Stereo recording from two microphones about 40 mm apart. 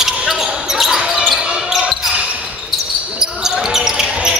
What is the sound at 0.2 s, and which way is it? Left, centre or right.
Basketball bounce, centre.